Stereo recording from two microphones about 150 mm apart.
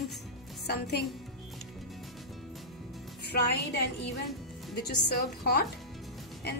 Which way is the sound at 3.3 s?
90° left.